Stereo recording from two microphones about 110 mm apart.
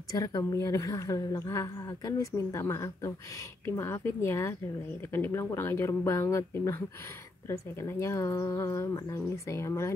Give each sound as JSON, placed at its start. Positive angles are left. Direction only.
{"t": 0.1, "sound": "a woman's voice", "side_deg": 35}